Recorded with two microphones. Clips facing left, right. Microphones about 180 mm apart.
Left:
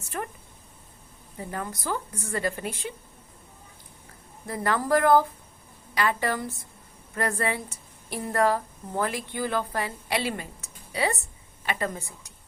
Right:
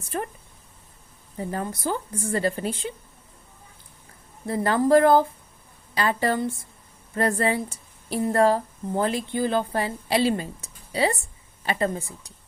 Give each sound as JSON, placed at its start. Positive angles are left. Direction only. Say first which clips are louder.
{"t": 0.1, "sound": "a woman's voice", "louder": "right 4 dB", "side_deg": -30}
{"t": 1.4, "sound": "a woman's voice", "louder": "right 5 dB", "side_deg": -30}
{"t": 4.4, "sound": "a woman's voice", "louder": "right 5 dB", "side_deg": -30}